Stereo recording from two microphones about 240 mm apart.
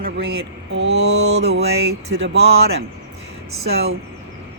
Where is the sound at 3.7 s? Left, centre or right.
Right.